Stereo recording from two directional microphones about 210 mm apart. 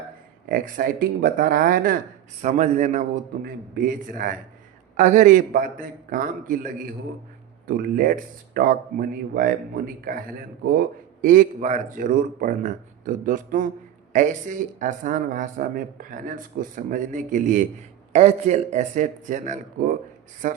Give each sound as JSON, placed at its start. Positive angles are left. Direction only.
{"t": 0.4, "sound": "speech", "side_deg": -40}
{"t": 7.7, "sound": "speech", "side_deg": -45}